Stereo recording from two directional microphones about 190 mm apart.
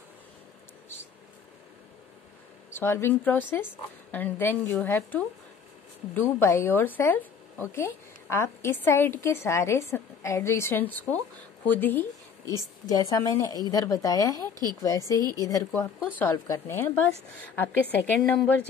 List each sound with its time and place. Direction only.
2.7 s a woman's voice: 10° left (ahead or behind)
14.4 s a woman's voice: 20° right (ahead or behind)
14.8 s a woman's voice: 15° left (ahead or behind)
18.2 s speech: 5° left (ahead or behind)